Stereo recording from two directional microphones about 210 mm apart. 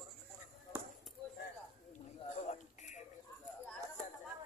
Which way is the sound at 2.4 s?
35° left (ahead or behind).